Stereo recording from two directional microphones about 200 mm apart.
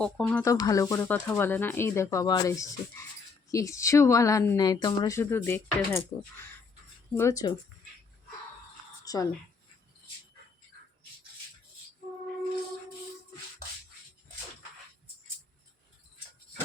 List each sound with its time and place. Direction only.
0.0 s speech: 5° left (ahead or behind)
7.2 s speech: 15° left (ahead or behind)
9.0 s a woman's voice: 15° left (ahead or behind)